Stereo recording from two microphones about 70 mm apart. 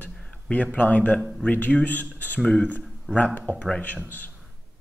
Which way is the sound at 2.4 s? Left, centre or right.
Centre.